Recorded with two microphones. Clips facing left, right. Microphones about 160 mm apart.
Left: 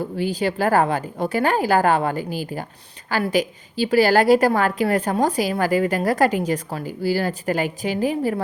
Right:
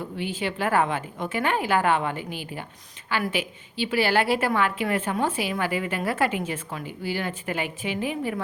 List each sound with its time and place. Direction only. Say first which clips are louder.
0.0 s a woman's voice: left 7 dB; 35° left (ahead or behind)